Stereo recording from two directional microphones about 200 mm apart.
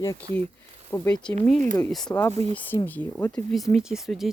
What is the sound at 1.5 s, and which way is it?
Speech, 35° right (ahead or behind).